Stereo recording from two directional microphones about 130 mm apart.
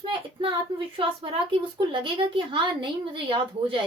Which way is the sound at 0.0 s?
40° right (ahead or behind).